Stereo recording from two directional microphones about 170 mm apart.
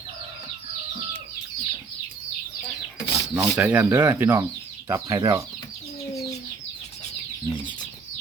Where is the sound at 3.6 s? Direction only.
10° right (ahead or behind).